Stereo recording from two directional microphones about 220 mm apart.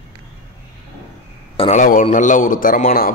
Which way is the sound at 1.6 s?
35° left (ahead or behind).